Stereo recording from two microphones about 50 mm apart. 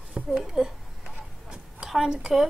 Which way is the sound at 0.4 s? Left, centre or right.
Centre.